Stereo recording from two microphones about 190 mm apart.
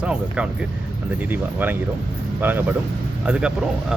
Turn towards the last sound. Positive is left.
turn(degrees=-5)  # may be behind; listen again after turning